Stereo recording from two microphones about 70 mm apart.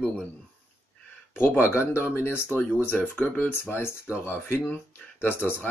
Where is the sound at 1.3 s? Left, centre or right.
Left.